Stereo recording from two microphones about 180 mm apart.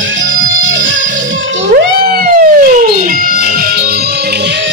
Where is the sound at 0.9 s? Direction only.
45° right (ahead or behind).